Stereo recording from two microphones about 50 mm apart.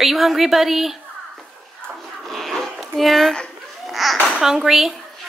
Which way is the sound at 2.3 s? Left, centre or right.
Centre.